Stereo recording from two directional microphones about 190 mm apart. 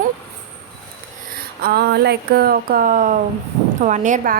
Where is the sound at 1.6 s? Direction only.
60° right (ahead or behind).